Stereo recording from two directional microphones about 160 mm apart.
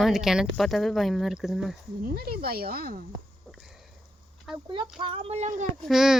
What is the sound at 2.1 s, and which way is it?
Speech, 75° right (ahead or behind).